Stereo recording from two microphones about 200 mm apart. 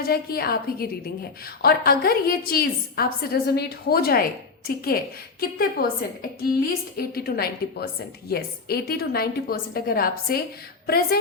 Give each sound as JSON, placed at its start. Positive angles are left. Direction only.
{"t": 0.0, "sound": "a woman's voice", "side_deg": 50}